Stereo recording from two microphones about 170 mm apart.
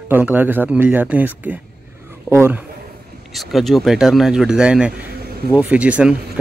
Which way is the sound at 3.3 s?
Centre (ahead or behind).